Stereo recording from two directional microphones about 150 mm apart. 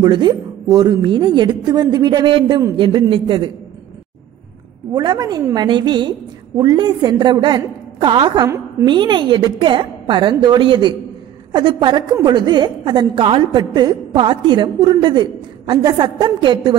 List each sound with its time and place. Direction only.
0.0 s a woman's voice: 30° right (ahead or behind)
4.9 s a woman's voice: 25° right (ahead or behind)